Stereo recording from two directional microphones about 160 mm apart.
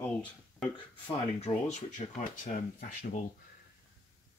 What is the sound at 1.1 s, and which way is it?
Speech, 45° left (ahead or behind).